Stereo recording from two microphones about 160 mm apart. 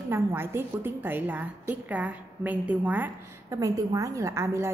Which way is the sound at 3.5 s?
20° right (ahead or behind).